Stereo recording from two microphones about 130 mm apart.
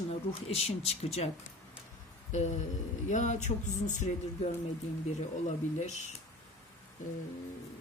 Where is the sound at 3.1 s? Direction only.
65° left (ahead or behind).